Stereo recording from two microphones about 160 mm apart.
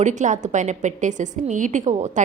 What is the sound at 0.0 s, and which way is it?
A woman's voice, 50° right (ahead or behind).